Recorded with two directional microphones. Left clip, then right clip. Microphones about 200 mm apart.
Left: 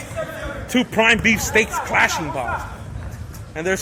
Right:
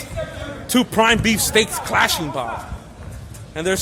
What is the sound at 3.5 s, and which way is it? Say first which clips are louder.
Speech: right 1 dB; 15° right (ahead or behind).